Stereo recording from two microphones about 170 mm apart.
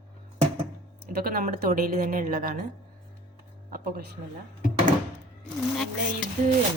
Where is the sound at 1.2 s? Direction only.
60° right (ahead or behind).